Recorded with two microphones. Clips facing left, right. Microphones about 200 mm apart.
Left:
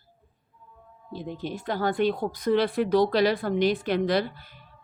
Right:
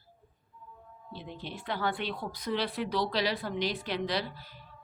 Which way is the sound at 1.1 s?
45° left (ahead or behind).